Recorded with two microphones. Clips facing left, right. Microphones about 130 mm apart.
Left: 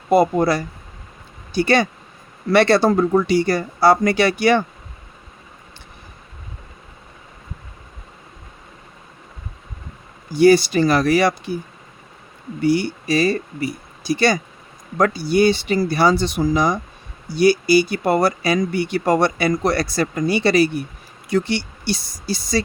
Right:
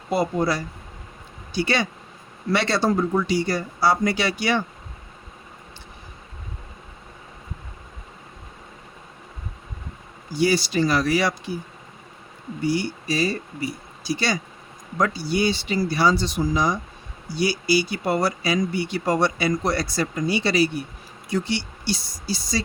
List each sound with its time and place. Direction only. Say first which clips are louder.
0.1 s speech: left 7 dB; 55° left (ahead or behind)
10.3 s speech: left 8 dB; 55° left (ahead or behind)
12.6 s speech: left 6 dB; 65° left (ahead or behind)